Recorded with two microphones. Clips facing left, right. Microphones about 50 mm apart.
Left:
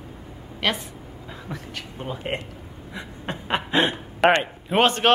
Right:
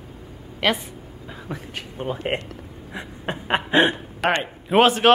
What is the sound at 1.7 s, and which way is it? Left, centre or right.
Speech, right.